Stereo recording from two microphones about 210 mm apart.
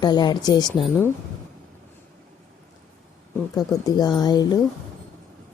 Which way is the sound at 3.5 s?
15° left (ahead or behind).